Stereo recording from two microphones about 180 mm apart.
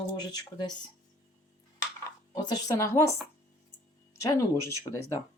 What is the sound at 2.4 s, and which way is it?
Speech, 20° left (ahead or behind).